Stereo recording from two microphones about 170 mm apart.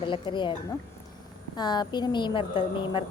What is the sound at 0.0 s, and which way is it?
Speech, 30° left (ahead or behind).